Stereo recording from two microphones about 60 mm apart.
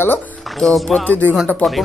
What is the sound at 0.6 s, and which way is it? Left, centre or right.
Speech, centre.